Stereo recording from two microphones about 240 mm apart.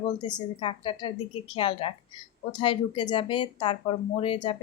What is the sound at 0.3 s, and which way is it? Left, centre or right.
Speech, centre.